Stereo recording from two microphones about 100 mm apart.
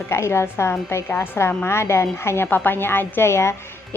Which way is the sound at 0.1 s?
25° left (ahead or behind).